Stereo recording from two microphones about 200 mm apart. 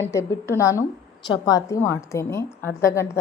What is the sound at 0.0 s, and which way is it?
A woman's voice, 15° left (ahead or behind).